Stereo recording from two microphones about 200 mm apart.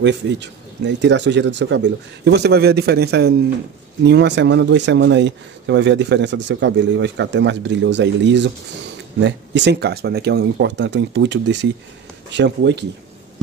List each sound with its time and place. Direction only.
0.0 s speech: 60° right (ahead or behind)